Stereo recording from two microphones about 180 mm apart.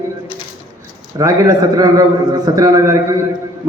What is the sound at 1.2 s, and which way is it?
A man's voice, 20° right (ahead or behind).